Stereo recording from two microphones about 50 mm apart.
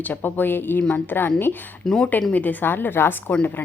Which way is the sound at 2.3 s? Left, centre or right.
Left.